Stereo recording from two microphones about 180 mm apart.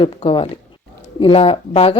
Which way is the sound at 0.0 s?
30° left (ahead or behind).